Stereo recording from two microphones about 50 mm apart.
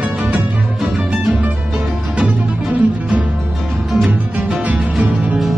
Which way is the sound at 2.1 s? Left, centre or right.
Right.